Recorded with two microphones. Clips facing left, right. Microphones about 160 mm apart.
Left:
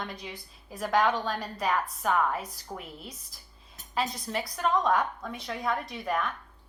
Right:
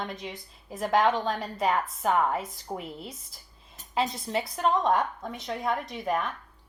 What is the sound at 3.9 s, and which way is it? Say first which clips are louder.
A woman's voice: right 3 dB; 25° right (ahead or behind).